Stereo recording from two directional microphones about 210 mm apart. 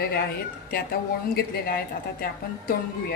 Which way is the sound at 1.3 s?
45° left (ahead or behind).